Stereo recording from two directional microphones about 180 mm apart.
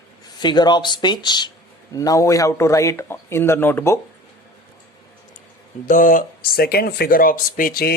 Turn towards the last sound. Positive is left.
turn(degrees=55)  # may be behind; listen again after turning